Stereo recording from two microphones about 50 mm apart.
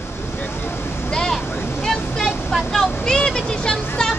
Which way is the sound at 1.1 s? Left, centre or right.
Centre.